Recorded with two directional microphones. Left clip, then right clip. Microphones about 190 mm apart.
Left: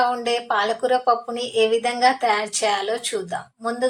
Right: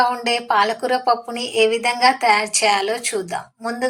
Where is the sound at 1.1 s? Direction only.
45° left (ahead or behind).